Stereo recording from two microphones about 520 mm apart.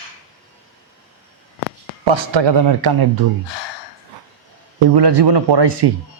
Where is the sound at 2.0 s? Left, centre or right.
Right.